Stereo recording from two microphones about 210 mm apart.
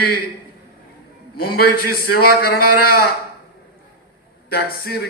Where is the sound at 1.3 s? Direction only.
45° left (ahead or behind).